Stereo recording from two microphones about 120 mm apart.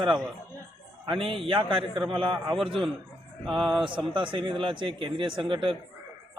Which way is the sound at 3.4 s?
Centre (ahead or behind).